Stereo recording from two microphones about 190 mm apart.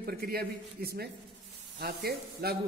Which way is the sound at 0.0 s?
55° right (ahead or behind).